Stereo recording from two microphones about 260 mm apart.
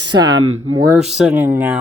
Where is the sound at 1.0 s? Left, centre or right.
Centre.